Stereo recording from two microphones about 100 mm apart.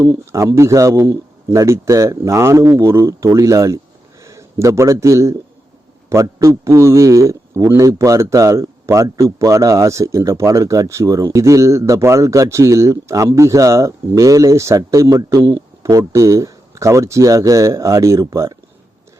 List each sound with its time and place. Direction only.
0.0 s a man's voice: 30° right (ahead or behind)